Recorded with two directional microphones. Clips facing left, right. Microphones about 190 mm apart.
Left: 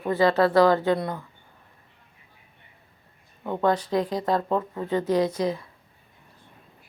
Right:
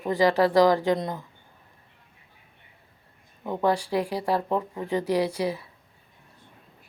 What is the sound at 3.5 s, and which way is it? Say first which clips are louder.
Speech: left 1 dB; 10° right (ahead or behind).